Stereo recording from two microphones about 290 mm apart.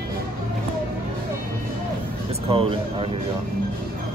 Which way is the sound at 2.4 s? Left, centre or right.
Centre.